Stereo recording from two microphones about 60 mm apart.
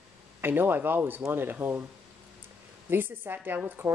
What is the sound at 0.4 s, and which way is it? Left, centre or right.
Speech, right.